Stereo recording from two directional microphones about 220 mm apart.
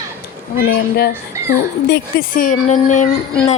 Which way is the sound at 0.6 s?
45° left (ahead or behind).